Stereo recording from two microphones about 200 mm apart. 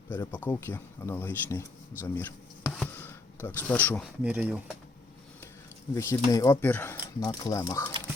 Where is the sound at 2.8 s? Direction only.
10° left (ahead or behind).